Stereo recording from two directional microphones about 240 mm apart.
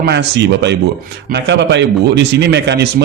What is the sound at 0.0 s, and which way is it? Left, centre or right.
A man's voice, right.